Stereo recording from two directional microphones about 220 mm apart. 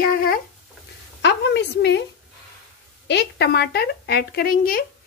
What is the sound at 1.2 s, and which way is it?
Speech, 50° left (ahead or behind).